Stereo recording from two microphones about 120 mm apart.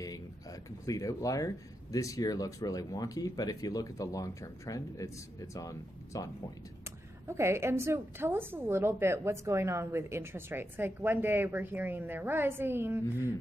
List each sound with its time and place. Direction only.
0.0 s speech: 30° left (ahead or behind)
7.2 s a woman's voice: 20° right (ahead or behind)